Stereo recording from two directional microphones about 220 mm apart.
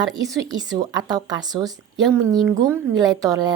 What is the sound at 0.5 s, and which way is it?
A woman's voice, 15° right (ahead or behind).